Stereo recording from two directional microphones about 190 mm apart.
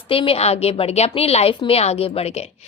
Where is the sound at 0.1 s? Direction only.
30° left (ahead or behind).